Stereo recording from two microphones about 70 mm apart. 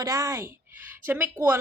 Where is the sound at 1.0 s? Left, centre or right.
Right.